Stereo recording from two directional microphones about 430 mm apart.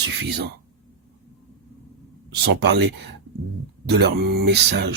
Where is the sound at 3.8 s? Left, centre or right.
Right.